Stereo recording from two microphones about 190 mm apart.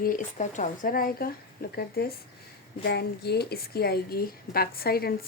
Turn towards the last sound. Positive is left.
turn(degrees=55)  # may be behind; listen again after turning